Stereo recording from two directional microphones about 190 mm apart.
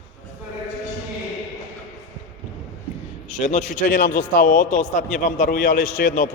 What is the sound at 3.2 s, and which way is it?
A man's voice, 40° left (ahead or behind).